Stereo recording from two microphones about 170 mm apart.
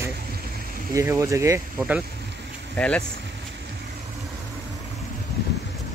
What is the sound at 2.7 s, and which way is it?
Speech, 5° left (ahead or behind).